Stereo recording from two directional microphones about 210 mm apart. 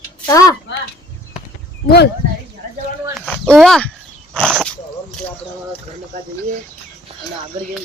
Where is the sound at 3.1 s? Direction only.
5° left (ahead or behind).